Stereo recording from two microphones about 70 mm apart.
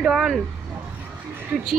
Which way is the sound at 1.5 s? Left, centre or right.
Right.